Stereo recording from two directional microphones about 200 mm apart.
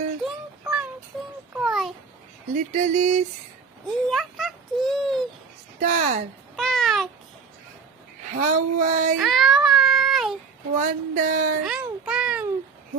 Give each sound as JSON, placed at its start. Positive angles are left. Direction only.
{"t": 1.5, "sound": "babbling", "side_deg": 0}
{"t": 2.5, "sound": "speech", "side_deg": -40}
{"t": 3.9, "sound": "a child's voice", "side_deg": 0}
{"t": 5.8, "sound": "speech", "side_deg": -40}
{"t": 6.6, "sound": "babbling", "side_deg": 0}
{"t": 8.3, "sound": "speech", "side_deg": -35}
{"t": 9.1, "sound": "child singing", "side_deg": 0}
{"t": 10.8, "sound": "speech", "side_deg": -40}
{"t": 11.6, "sound": "music", "side_deg": -5}